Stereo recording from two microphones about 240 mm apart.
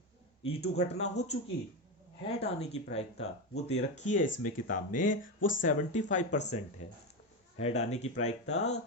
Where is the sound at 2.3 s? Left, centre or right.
Left.